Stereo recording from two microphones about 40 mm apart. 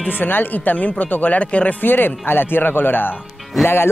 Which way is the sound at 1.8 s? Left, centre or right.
Left.